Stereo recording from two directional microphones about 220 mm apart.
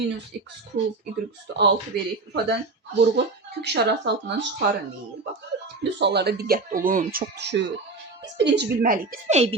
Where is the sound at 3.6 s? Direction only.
50° right (ahead or behind).